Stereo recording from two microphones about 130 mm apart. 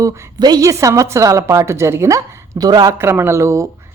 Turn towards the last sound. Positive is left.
turn(degrees=-20)  # may be behind; listen again after turning